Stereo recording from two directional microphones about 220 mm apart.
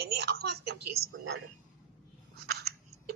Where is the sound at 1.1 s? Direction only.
65° right (ahead or behind).